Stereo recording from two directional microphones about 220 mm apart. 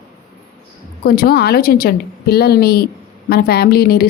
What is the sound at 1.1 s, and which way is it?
Speech, 45° left (ahead or behind).